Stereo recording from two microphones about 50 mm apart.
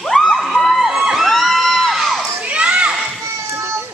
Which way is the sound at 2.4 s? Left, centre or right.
Right.